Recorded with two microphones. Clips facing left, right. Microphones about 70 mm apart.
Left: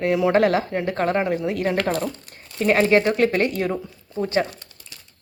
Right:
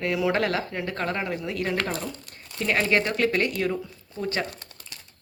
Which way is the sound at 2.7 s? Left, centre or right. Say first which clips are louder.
Left 6 dB; left.